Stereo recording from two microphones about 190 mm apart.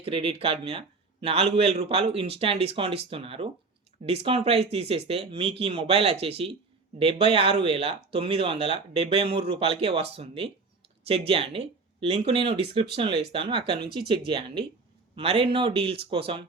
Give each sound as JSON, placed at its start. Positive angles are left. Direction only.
{"t": 0.0, "sound": "speech", "side_deg": -30}